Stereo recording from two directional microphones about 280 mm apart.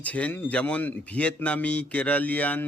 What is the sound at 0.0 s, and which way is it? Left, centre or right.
A man's voice, centre.